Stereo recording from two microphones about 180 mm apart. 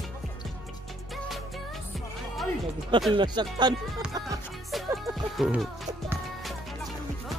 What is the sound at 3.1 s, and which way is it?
Speech, 25° right (ahead or behind).